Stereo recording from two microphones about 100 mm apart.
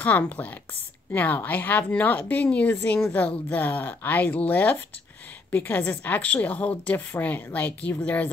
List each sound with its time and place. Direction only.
0.0 s a woman's voice: 15° left (ahead or behind)